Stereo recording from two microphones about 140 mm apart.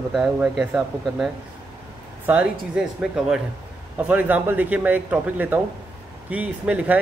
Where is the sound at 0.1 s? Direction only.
5° right (ahead or behind).